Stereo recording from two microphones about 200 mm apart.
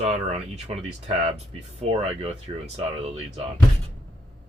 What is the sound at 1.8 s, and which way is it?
Speech, 30° right (ahead or behind).